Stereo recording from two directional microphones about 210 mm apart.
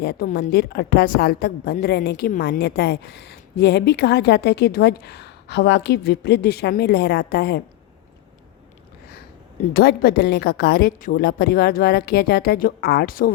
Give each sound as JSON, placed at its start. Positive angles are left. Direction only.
{"t": 0.0, "sound": "a woman's voice", "side_deg": 50}
{"t": 9.7, "sound": "a woman's voice", "side_deg": 45}